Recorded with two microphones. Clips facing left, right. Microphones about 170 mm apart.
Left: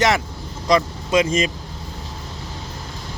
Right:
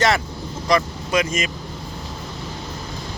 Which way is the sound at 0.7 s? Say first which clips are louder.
Left 2 dB; 25° left (ahead or behind).